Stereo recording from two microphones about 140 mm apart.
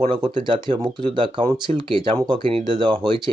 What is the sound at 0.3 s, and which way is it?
Speech, 35° right (ahead or behind).